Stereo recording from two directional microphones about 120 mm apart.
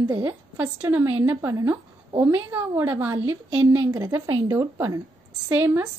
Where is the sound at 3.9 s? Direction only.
30° right (ahead or behind).